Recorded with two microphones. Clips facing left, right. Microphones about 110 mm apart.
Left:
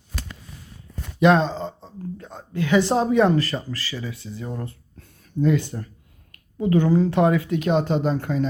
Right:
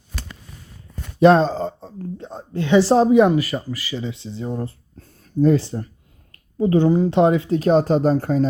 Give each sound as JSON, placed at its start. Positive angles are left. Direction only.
{"t": 1.2, "sound": "a sound", "side_deg": -35}
{"t": 2.1, "sound": "speech", "side_deg": -30}
{"t": 3.1, "sound": "speech", "side_deg": -15}